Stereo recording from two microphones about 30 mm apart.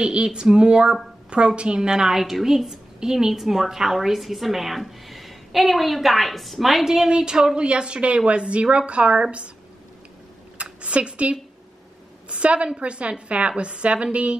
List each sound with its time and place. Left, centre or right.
0.0 s a woman's voice: right
1.8 s a woman's voice: centre
7.5 s a woman's voice: right
10.6 s a woman's voice: right